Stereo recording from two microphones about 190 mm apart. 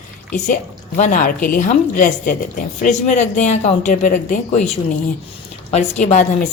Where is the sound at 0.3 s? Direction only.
40° left (ahead or behind).